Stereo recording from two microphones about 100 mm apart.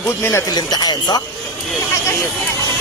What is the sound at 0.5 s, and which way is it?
Speech, 45° left (ahead or behind).